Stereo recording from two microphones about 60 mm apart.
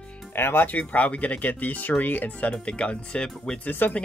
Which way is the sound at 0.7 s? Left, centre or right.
Left.